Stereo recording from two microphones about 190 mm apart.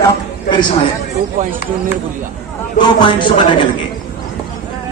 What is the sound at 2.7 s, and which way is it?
Speech, 25° left (ahead or behind).